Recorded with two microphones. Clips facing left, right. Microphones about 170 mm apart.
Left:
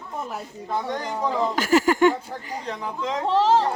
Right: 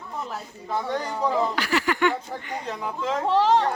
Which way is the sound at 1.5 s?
45° left (ahead or behind).